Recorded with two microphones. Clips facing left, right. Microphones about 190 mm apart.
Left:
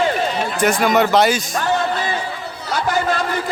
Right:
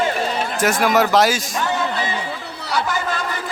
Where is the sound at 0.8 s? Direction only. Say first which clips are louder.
Even; centre (ahead or behind).